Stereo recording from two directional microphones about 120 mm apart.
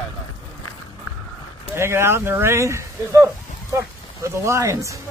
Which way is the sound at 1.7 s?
20° right (ahead or behind).